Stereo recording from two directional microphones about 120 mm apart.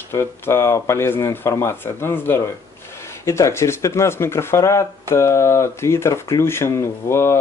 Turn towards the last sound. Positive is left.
turn(degrees=20)  # may be behind; listen again after turning